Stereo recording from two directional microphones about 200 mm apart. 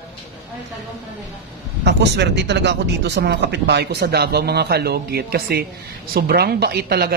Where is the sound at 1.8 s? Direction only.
60° right (ahead or behind).